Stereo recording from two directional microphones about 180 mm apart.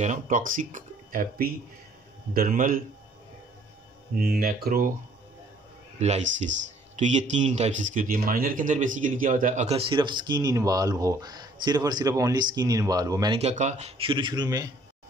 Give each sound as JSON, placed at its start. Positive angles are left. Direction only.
{"t": 0.0, "sound": "speech", "side_deg": -45}
{"t": 4.2, "sound": "speech", "side_deg": -60}
{"t": 5.9, "sound": "speech", "side_deg": -40}
{"t": 13.4, "sound": "speech", "side_deg": -40}